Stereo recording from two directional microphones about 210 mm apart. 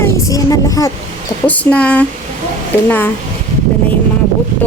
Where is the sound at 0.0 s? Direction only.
15° left (ahead or behind).